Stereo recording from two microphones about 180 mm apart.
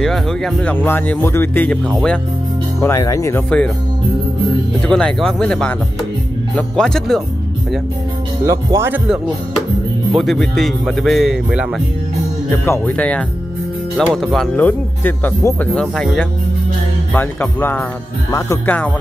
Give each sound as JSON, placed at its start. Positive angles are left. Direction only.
{"t": 0.0, "sound": "speech", "side_deg": 0}
{"t": 2.8, "sound": "speech", "side_deg": 15}
{"t": 3.4, "sound": "speech", "side_deg": 5}
{"t": 4.8, "sound": "speech", "side_deg": 5}
{"t": 8.5, "sound": "speech", "side_deg": -15}
{"t": 10.1, "sound": "speech", "side_deg": 0}
{"t": 12.4, "sound": "speech", "side_deg": 15}